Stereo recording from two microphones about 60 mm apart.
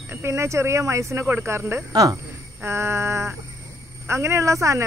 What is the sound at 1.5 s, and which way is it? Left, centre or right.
Speech, right.